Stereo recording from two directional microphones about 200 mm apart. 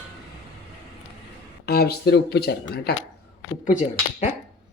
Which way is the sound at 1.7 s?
55° left (ahead or behind).